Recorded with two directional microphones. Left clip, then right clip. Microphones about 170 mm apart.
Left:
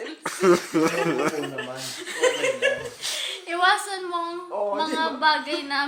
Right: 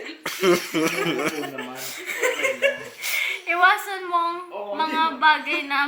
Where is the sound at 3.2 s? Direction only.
15° left (ahead or behind).